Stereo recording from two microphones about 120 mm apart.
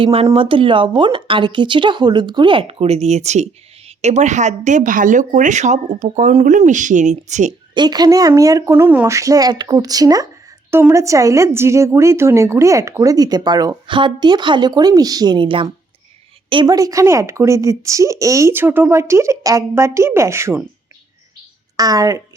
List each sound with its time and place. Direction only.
0.0 s speech: 55° right (ahead or behind); by 7.5 s 80° right
7.7 s speech: 35° right (ahead or behind)
8.7 s speech: 15° right (ahead or behind)
9.0 s speech: 25° right (ahead or behind)
10.7 s a woman's voice: 20° right (ahead or behind); by 16.7 s 40° right (ahead or behind)
16.7 s speech: 30° right (ahead or behind)
21.8 s speech: 30° right (ahead or behind)